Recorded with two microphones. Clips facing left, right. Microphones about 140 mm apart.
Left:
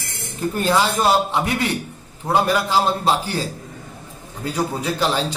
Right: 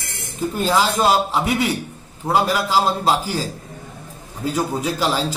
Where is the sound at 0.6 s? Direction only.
Centre (ahead or behind).